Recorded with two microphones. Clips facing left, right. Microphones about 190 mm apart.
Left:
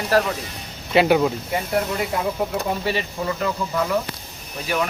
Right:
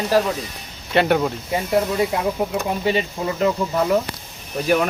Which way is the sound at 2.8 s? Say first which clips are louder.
Right 3 dB; 20° right (ahead or behind).